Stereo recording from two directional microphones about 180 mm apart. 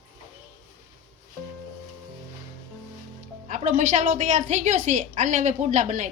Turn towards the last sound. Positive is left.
turn(degrees=-45)  # may be behind; listen again after turning